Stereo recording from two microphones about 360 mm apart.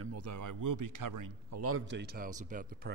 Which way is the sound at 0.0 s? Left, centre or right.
Right.